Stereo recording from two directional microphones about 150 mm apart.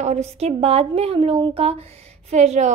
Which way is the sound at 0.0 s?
45° right (ahead or behind).